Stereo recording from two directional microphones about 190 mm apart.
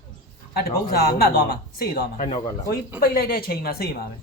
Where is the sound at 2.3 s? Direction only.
25° left (ahead or behind).